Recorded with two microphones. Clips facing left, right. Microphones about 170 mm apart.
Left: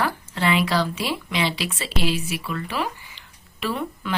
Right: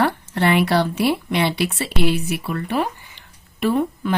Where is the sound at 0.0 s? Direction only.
65° right (ahead or behind).